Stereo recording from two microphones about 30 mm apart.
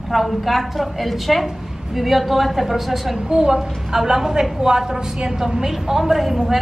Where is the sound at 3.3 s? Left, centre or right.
Right.